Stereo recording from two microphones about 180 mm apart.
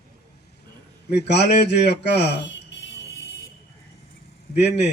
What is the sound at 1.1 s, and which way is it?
Speech, 70° left (ahead or behind).